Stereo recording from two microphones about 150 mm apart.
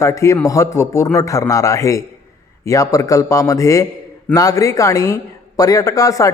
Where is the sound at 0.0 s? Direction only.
20° left (ahead or behind).